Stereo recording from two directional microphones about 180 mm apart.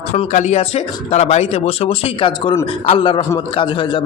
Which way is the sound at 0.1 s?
40° left (ahead or behind).